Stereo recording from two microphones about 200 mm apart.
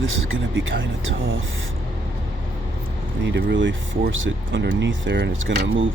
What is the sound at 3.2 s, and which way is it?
Speech, 60° right (ahead or behind).